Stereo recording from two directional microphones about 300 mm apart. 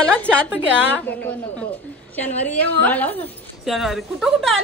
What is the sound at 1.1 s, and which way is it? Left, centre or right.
A woman's voice, centre.